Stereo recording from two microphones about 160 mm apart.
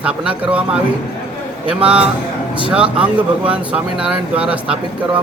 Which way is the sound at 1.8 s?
5° right (ahead or behind).